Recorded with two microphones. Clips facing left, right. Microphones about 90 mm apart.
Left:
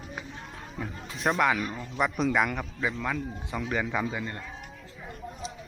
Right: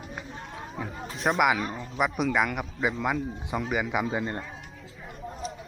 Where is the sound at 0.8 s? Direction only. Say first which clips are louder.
Even; 10° right (ahead or behind).